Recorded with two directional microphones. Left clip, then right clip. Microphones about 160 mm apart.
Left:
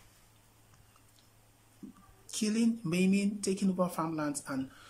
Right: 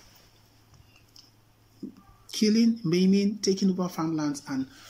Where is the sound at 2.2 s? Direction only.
5° right (ahead or behind).